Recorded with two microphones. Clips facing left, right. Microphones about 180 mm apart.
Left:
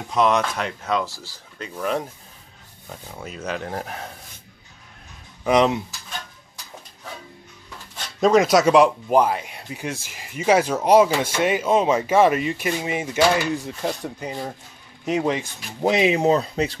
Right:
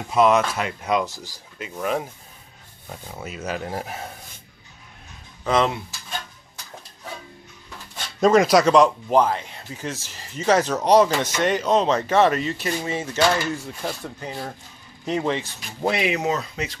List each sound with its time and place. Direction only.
0.1 s speech: 5° right (ahead or behind)
3.2 s speech: 5° right (ahead or behind)
5.4 s speech: 15° left (ahead or behind)
8.2 s speech: centre (ahead or behind); by 16.7 s 30° left (ahead or behind)